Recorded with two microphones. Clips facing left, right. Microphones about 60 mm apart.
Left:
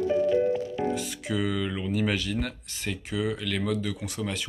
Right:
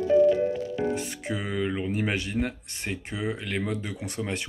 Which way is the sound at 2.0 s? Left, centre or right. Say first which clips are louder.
Left 3 dB; right.